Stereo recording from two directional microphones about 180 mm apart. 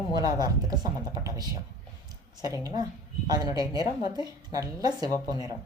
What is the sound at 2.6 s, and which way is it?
A woman's voice, 20° right (ahead or behind).